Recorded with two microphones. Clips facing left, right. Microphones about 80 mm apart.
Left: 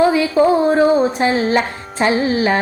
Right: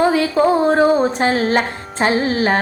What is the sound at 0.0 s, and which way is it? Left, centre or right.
Music, right.